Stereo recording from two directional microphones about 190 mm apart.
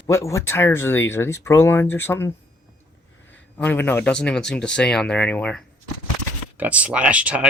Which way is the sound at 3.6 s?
10° left (ahead or behind).